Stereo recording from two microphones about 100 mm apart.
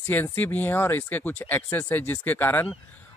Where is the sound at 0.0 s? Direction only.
20° left (ahead or behind).